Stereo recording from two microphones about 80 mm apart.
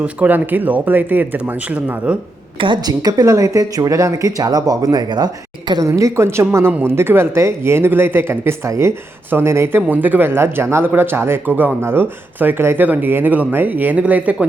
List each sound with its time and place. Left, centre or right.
0.0 s speech: right
2.8 s speech: right
6.0 s speech: right
9.9 s speech: right